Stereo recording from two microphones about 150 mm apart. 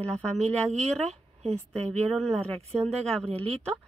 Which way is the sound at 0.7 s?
45° right (ahead or behind).